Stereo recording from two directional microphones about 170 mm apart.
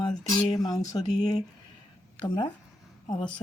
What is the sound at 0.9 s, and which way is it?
Speech, 25° left (ahead or behind).